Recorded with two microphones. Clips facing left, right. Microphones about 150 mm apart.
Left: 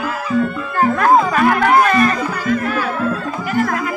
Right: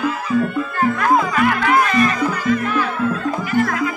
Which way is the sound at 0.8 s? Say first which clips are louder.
Left 4 dB; 40° left (ahead or behind).